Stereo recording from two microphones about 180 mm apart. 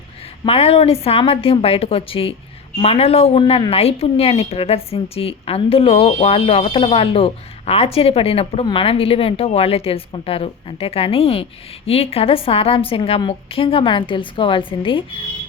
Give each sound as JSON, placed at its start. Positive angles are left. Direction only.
{"t": 0.4, "sound": "a woman's voice", "side_deg": 30}